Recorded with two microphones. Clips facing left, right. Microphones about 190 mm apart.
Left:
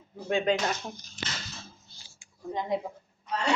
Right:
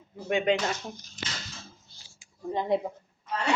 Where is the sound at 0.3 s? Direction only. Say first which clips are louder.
Right 1 dB; 20° right (ahead or behind).